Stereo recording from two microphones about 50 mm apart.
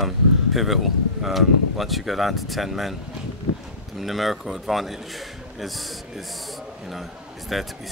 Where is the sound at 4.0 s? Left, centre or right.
Centre.